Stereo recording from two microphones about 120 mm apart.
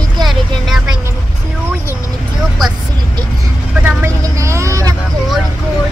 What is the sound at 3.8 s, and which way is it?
Speech, 25° right (ahead or behind).